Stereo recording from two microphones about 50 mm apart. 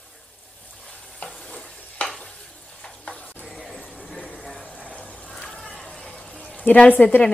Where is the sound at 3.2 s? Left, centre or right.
Left.